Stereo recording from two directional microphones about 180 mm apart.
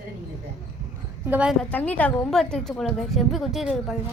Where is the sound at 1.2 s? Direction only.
10° right (ahead or behind).